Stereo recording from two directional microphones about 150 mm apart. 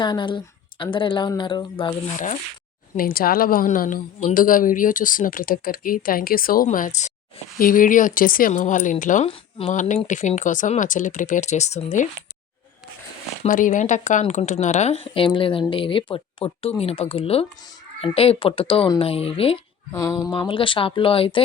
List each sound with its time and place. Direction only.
0.0 s speech: 30° left (ahead or behind)
3.0 s a woman's voice: 75° left (ahead or behind); by 9.2 s 60° left (ahead or behind)
9.2 s speech: 40° left (ahead or behind)
13.5 s speech: 60° left (ahead or behind); by 19.5 s 40° left (ahead or behind)
19.9 s speech: 20° left (ahead or behind)
20.3 s speech: 35° left (ahead or behind)